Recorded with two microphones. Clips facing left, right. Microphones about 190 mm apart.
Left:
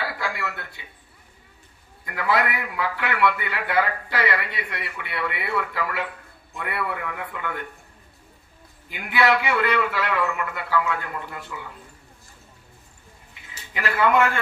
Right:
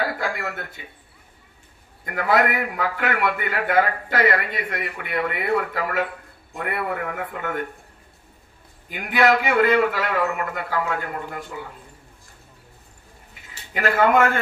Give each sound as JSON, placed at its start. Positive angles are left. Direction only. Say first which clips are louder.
{"t": 0.0, "sound": "a sound", "louder": "right 4 dB", "side_deg": -45}
{"t": 2.0, "sound": "a man's voice", "louder": "right 3 dB", "side_deg": -45}
{"t": 8.9, "sound": "a man's voice", "louder": "right 2 dB", "side_deg": -45}
{"t": 13.7, "sound": "a man's voice", "louder": "right 3 dB", "side_deg": -45}